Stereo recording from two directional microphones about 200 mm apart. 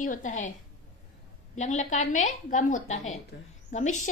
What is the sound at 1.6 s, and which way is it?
A woman's voice, 35° left (ahead or behind).